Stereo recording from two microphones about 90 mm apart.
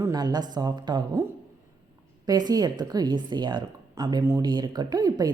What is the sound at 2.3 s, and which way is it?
A woman's voice, 45° right (ahead or behind).